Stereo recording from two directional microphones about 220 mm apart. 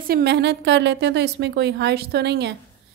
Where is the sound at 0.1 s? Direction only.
50° right (ahead or behind).